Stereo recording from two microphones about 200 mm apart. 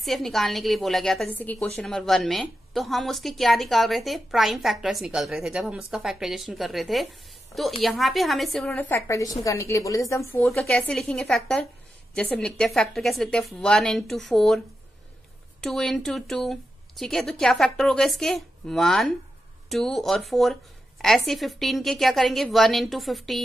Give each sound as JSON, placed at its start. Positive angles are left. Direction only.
{"t": 0.0, "sound": "a woman's voice", "side_deg": 0}
{"t": 15.6, "sound": "a woman's voice", "side_deg": 0}